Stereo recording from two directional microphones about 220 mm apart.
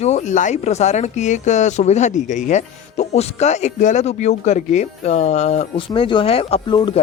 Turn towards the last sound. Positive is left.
turn(degrees=20)  # may be behind; listen again after turning